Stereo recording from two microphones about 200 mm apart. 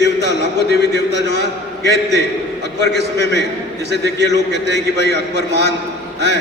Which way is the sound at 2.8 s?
60° right (ahead or behind).